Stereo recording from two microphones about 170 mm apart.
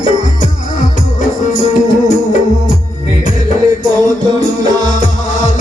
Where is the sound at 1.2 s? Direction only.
50° left (ahead or behind).